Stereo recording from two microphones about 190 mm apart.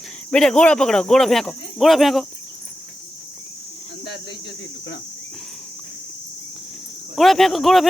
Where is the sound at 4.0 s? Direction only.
65° left (ahead or behind).